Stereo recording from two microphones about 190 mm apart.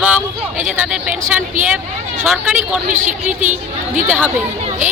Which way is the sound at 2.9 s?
40° right (ahead or behind).